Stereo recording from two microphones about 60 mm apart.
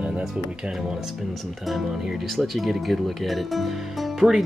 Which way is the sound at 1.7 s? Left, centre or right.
Centre.